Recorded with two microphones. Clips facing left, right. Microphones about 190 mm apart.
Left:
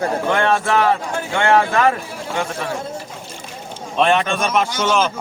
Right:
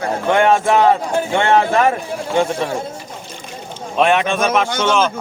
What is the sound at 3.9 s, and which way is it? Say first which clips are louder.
A man's voice: right 2 dB; 5° right (ahead or behind).